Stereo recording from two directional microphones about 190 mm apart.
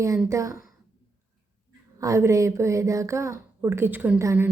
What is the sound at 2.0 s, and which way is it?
Speech, 15° right (ahead or behind).